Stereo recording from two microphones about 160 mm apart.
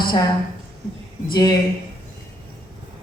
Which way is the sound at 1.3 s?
25° left (ahead or behind).